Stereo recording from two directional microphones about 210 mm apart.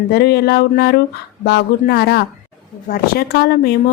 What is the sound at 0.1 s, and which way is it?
A woman's voice, 50° left (ahead or behind).